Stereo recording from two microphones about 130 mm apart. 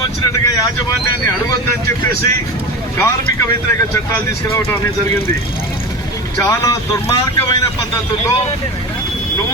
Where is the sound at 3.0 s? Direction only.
20° left (ahead or behind).